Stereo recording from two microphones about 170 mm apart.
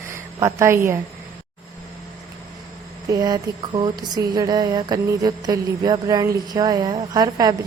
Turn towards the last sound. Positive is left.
turn(degrees=-25)  # may be behind; listen again after turning